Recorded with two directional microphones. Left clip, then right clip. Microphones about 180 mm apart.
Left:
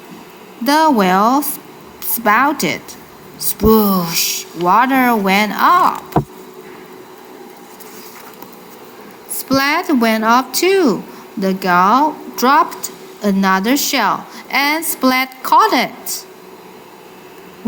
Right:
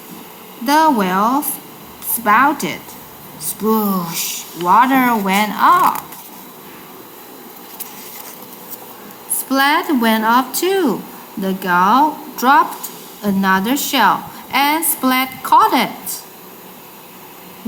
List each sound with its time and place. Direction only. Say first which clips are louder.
0.6 s a woman's voice: left 1 dB; 30° left (ahead or behind)
9.5 s a woman's voice: even; 20° left (ahead or behind)